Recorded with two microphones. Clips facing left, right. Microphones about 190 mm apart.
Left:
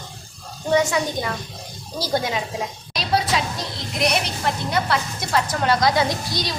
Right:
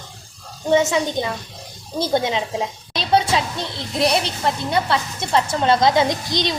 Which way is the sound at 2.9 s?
25° right (ahead or behind).